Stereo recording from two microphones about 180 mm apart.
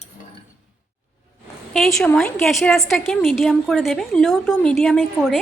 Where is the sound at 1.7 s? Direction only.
Centre (ahead or behind).